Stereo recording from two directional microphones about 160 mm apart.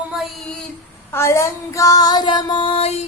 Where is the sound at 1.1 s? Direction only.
15° left (ahead or behind).